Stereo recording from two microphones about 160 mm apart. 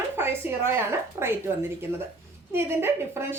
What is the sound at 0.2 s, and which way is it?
Speech, 15° right (ahead or behind).